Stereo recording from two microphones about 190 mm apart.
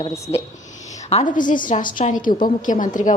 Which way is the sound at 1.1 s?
40° left (ahead or behind).